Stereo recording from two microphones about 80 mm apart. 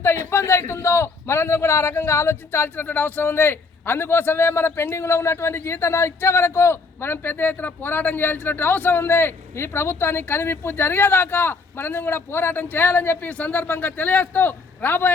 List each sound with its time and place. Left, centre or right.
0.0 s a man's voice: left